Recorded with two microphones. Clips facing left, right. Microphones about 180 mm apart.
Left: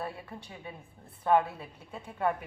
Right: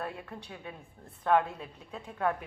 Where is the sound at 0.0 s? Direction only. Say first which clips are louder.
Even; 5° left (ahead or behind).